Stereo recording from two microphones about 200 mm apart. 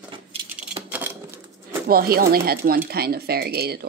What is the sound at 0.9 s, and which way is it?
Typewriter, 10° right (ahead or behind).